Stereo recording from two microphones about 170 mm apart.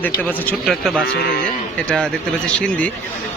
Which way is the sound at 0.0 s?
10° left (ahead or behind).